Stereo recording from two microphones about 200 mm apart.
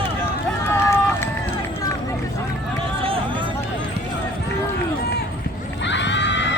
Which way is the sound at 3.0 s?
30° right (ahead or behind).